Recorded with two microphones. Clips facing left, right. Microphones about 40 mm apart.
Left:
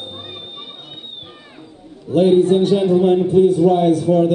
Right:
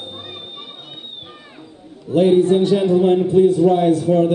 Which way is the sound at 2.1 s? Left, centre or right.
Centre.